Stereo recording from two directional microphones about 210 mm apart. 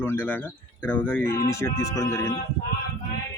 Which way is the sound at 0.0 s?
10° left (ahead or behind).